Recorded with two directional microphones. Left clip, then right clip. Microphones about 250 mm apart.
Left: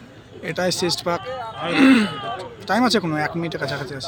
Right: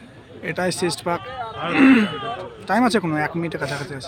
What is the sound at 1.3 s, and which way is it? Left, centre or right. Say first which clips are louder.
Roaring cats: left 1 dB; left.